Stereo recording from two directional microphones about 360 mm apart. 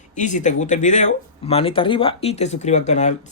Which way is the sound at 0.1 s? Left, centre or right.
Left.